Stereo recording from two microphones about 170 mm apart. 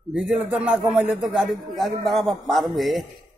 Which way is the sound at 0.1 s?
5° right (ahead or behind).